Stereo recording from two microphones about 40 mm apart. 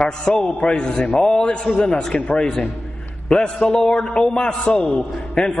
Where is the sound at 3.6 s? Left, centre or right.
Left.